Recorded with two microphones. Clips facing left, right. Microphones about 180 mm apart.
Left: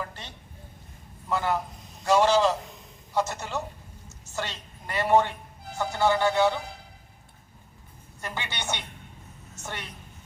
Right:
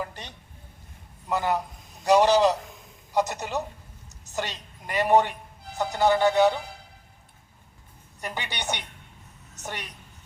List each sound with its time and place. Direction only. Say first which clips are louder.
0.0 s a sound: right 2 dB; 15° right (ahead or behind)
1.3 s a woman's voice: right 1 dB; 15° right (ahead or behind)
8.2 s a woman's voice: right 1 dB; 15° right (ahead or behind)